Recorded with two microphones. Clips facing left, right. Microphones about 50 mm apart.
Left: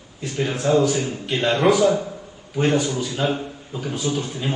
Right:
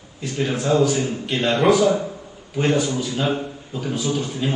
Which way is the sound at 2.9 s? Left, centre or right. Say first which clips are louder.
Right 1 dB; centre.